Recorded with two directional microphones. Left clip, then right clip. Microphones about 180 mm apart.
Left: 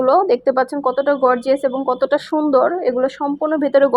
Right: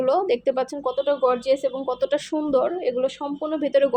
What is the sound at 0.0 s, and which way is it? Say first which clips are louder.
A woman's voice: left 7 dB; 5° left (ahead or behind).